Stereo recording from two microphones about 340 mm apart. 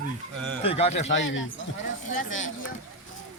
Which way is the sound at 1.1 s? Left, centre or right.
Left.